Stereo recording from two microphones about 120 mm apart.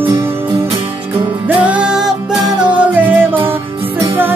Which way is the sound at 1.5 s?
10° right (ahead or behind).